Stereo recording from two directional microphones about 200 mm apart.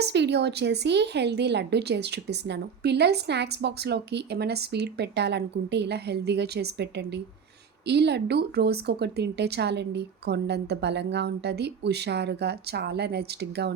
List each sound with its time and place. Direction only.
0.0 s a woman's voice: 60° right (ahead or behind)